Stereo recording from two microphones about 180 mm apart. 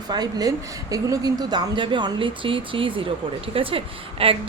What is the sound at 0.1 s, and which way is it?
A woman's voice, 20° right (ahead or behind).